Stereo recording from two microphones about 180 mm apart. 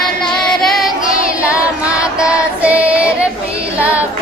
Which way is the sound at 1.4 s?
5° right (ahead or behind).